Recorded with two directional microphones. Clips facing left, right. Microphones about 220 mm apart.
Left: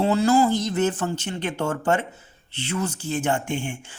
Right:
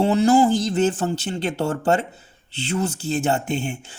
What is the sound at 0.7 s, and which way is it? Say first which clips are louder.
Speech: right 3 dB; 30° right (ahead or behind).